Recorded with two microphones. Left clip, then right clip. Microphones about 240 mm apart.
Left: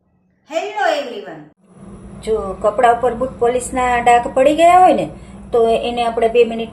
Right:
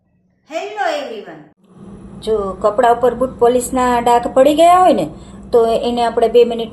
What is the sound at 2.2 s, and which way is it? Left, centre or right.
Speech, centre.